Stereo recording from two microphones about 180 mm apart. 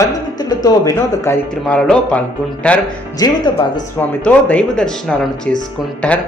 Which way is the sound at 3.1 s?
20° left (ahead or behind).